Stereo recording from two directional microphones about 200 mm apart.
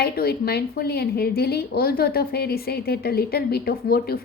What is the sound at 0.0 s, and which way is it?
Speech, 50° left (ahead or behind).